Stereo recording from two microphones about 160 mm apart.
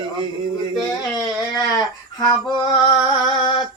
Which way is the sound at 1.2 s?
25° left (ahead or behind).